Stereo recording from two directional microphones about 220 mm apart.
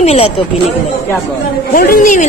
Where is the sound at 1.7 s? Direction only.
40° left (ahead or behind).